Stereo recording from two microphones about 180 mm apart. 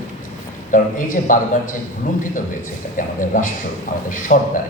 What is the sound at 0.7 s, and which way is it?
A man's voice, 45° left (ahead or behind).